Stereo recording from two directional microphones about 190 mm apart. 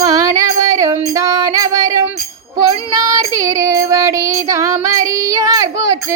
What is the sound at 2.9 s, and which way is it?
Child singing, 15° right (ahead or behind).